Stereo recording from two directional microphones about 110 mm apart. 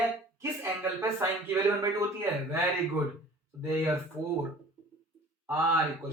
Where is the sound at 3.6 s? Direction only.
20° right (ahead or behind).